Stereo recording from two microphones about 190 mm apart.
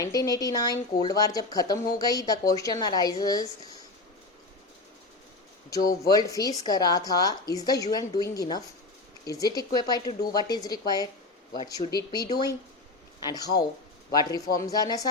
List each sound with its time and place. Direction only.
0.0 s a woman's voice: 20° left (ahead or behind)
6.1 s a woman's voice: 20° left (ahead or behind)